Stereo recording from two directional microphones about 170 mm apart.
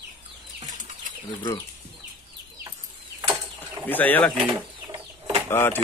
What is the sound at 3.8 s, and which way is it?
Speech, 10° left (ahead or behind).